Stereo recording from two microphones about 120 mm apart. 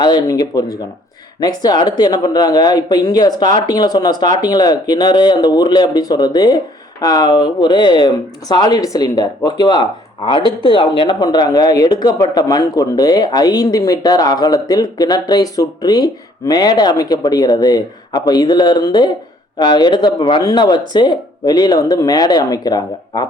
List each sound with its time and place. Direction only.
0.0 s speech: 35° left (ahead or behind)